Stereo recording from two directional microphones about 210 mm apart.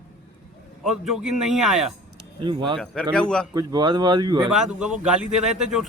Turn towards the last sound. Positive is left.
turn(degrees=-5)  # may be behind; listen again after turning